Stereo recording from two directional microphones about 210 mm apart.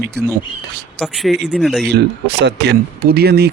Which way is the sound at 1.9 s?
55° right (ahead or behind).